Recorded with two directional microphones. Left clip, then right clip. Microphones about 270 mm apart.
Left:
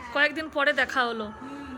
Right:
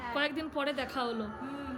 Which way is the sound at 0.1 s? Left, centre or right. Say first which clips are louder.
Left 9 dB; centre.